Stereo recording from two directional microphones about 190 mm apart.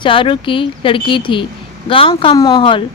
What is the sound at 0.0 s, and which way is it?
A woman's voice, 25° left (ahead or behind).